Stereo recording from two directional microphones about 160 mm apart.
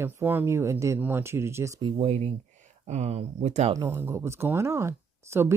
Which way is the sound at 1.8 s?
40° right (ahead or behind).